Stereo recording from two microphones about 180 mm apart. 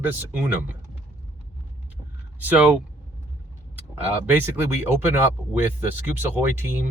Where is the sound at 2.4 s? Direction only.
10° right (ahead or behind).